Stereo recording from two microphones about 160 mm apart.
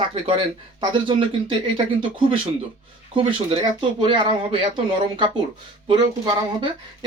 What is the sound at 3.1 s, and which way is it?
Speech, 35° right (ahead or behind).